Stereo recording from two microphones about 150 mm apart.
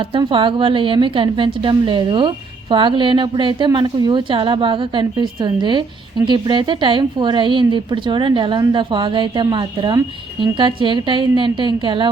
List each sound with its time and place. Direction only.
0.1 s a woman's voice: 35° right (ahead or behind)